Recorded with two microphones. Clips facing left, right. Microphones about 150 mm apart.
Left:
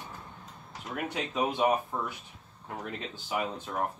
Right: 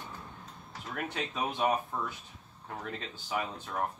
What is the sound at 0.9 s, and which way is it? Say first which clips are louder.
Speech: left 4 dB; 10° left (ahead or behind).